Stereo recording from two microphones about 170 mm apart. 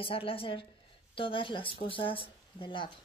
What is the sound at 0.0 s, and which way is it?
Speech, 35° left (ahead or behind).